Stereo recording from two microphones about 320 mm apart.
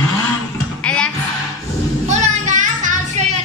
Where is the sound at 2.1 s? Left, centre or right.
Right.